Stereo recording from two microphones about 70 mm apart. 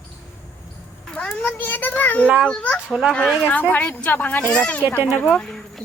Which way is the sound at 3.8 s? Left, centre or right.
Centre.